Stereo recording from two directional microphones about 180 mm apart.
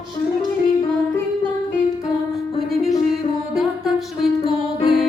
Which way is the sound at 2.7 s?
Centre (ahead or behind).